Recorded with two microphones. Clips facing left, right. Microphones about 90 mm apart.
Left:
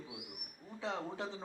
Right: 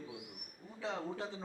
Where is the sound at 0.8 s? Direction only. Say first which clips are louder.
Even; 20° left (ahead or behind).